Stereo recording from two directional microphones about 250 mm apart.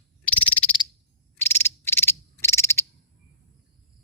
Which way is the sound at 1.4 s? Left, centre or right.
Centre.